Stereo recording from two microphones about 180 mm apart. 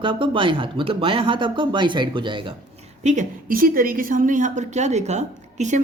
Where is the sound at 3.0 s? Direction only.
45° right (ahead or behind).